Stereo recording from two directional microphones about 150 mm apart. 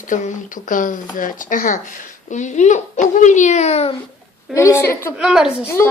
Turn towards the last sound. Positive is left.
turn(degrees=-5)  # may be behind; listen again after turning